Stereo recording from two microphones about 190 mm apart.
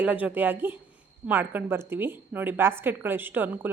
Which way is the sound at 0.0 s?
10° right (ahead or behind).